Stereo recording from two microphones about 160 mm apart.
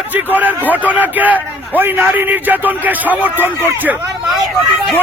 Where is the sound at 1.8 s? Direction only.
15° right (ahead or behind).